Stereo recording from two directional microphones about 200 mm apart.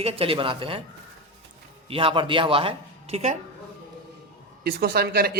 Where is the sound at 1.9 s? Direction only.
25° right (ahead or behind).